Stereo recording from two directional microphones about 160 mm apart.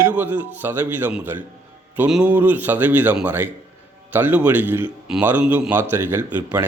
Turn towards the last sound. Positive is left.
turn(degrees=-15)  # may be behind; listen again after turning